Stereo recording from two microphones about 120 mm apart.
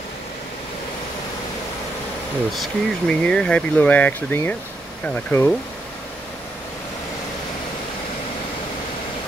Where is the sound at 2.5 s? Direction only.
5° left (ahead or behind).